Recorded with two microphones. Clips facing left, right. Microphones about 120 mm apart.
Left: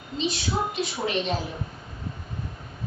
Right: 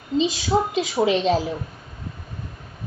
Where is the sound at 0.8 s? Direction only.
90° right.